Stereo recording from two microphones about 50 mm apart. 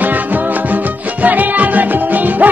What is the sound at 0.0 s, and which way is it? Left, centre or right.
Music, right.